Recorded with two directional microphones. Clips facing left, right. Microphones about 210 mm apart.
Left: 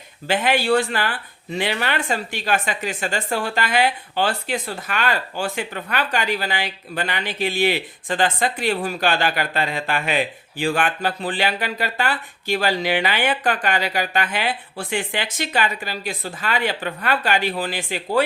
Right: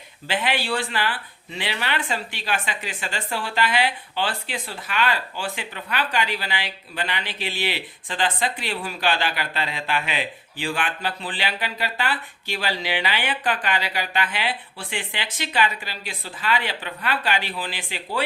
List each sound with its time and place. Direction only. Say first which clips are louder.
0.3 s speech: left 6 dB; 45° left (ahead or behind)